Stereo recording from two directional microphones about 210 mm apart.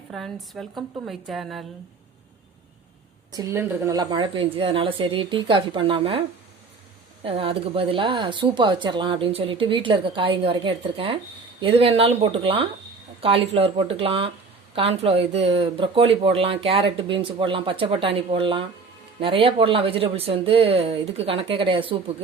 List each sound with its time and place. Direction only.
0.1 s speech: centre (ahead or behind)
3.3 s speech: 15° right (ahead or behind)